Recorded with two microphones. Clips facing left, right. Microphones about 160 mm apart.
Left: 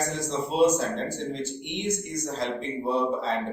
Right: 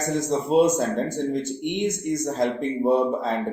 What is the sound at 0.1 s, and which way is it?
Speech, 50° right (ahead or behind).